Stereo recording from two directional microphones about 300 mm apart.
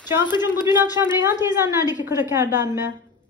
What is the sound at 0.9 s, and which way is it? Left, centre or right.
Speech, centre.